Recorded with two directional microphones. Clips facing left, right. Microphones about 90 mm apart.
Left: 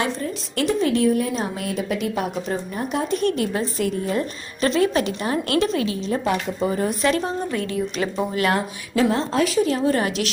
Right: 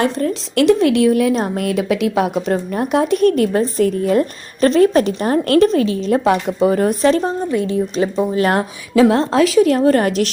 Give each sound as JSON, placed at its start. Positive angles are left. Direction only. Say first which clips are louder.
{"t": 0.2, "sound": "a woman's voice", "louder": "right 9 dB", "side_deg": -80}
{"t": 1.4, "sound": "a woman's voice", "louder": "right 7 dB", "side_deg": -55}
{"t": 3.2, "sound": "a woman's voice", "louder": "right 8 dB", "side_deg": -50}
{"t": 6.1, "sound": "speech", "louder": "right 7 dB", "side_deg": -65}
{"t": 7.0, "sound": "a woman's voice", "louder": "right 5 dB", "side_deg": -35}
{"t": 7.5, "sound": "speech", "louder": "right 7 dB", "side_deg": -25}
{"t": 9.0, "sound": "a woman's voice", "louder": "right 5 dB", "side_deg": -80}
{"t": 9.7, "sound": "a woman's voice", "louder": "right 7 dB", "side_deg": -55}